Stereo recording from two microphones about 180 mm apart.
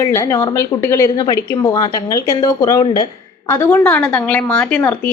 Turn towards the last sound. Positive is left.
turn(degrees=10)  # may be behind; listen again after turning